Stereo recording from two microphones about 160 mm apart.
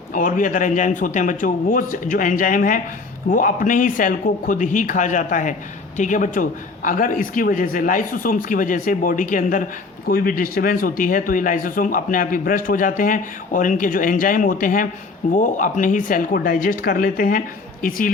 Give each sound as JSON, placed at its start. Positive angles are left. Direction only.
{"t": 0.1, "sound": "speech", "side_deg": 55}
{"t": 10.1, "sound": "speech", "side_deg": 65}